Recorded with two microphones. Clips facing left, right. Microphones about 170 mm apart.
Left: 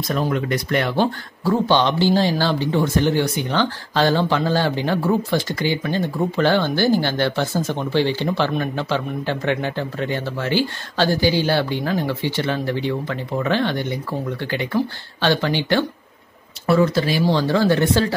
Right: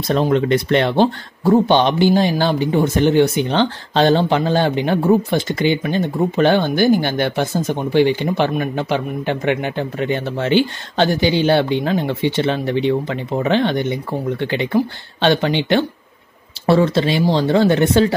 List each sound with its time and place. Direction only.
0.1 s speech: 25° right (ahead or behind)